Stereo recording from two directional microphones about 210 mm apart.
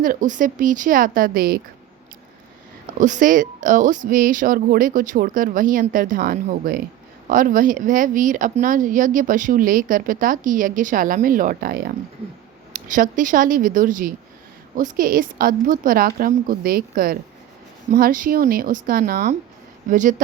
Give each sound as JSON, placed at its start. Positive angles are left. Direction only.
{"t": 0.0, "sound": "speech", "side_deg": -40}
{"t": 3.0, "sound": "speech", "side_deg": -35}